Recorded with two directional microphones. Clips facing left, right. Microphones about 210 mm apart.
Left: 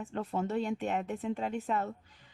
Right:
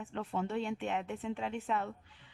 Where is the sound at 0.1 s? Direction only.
40° left (ahead or behind).